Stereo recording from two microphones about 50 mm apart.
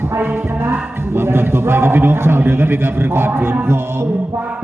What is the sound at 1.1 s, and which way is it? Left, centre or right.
A man's voice, right.